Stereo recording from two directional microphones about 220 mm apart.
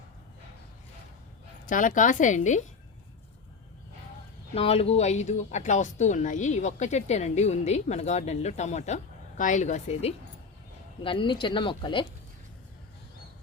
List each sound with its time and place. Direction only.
1.6 s speech: 35° left (ahead or behind)
4.5 s speech: 25° left (ahead or behind)